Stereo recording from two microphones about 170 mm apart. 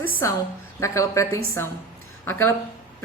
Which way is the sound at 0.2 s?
20° left (ahead or behind).